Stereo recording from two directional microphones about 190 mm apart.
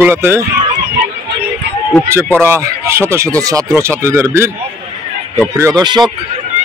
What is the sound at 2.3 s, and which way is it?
Speech, 15° right (ahead or behind).